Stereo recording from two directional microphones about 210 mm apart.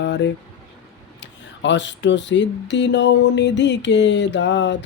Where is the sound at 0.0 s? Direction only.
55° left (ahead or behind).